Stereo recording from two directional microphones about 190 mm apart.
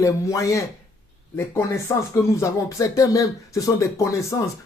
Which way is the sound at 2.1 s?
15° left (ahead or behind).